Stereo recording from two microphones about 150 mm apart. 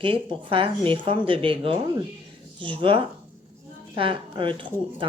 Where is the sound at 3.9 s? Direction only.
35° right (ahead or behind).